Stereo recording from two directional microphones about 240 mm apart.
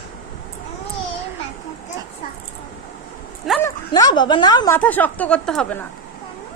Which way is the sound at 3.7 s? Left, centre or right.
Centre.